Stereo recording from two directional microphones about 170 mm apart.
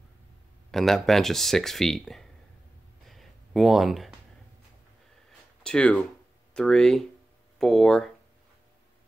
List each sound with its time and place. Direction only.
0.7 s speech: centre (ahead or behind)
3.1 s a sound: centre (ahead or behind)
5.6 s speech: 5° left (ahead or behind)